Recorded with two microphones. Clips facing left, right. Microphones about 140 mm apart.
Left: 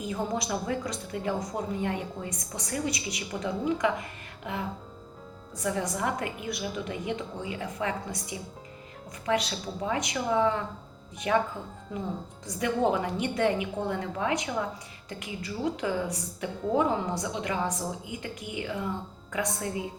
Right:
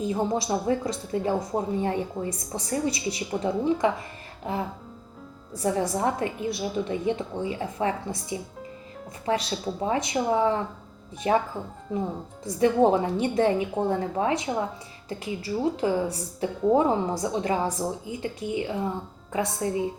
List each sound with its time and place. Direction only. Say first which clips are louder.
0.0 s a woman's voice: right 5 dB; 30° right (ahead or behind)
12.5 s a woman's voice: right 6 dB; 30° right (ahead or behind)